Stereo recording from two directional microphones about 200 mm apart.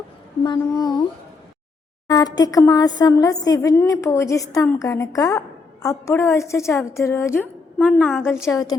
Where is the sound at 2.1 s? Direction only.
20° left (ahead or behind).